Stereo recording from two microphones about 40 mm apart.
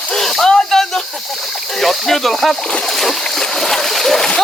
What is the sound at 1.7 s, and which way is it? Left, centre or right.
Speech, centre.